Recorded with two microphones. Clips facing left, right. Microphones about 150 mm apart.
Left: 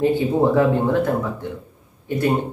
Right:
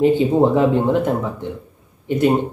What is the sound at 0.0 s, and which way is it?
Speech, 20° right (ahead or behind).